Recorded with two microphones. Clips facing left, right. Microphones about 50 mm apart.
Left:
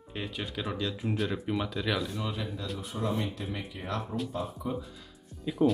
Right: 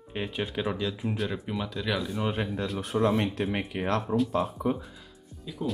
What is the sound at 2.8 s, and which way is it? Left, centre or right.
Speech, right.